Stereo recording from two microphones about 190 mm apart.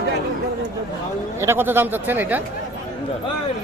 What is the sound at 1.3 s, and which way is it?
Speech, 10° right (ahead or behind).